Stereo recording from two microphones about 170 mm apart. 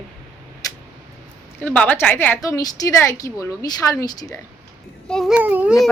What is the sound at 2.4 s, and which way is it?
Speech, 20° left (ahead or behind).